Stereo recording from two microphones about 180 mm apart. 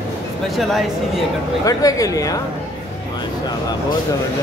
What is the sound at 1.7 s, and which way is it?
Speech, 20° left (ahead or behind).